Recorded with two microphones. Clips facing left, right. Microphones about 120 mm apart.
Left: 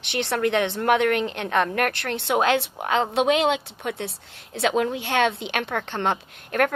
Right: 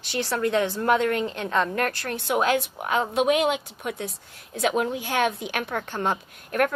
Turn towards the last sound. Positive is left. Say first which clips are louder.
# left 1 dB
turn(degrees=70)  # may be behind; listen again after turning